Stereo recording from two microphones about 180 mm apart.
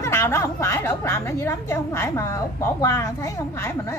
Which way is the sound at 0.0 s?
15° left (ahead or behind).